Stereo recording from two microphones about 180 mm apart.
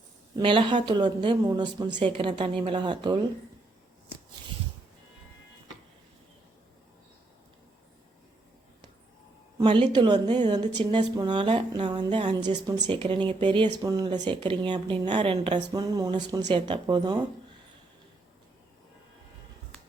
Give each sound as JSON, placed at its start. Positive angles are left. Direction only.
{"t": 0.3, "sound": "speech", "side_deg": -25}
{"t": 9.6, "sound": "speech", "side_deg": -25}